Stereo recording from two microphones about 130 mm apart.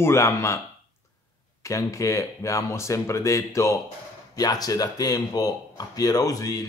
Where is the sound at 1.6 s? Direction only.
25° left (ahead or behind).